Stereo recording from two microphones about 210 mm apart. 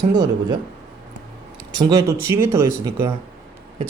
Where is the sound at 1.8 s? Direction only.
15° right (ahead or behind).